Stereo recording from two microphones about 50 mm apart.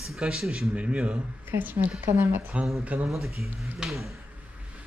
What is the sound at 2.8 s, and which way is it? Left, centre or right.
Speech, right.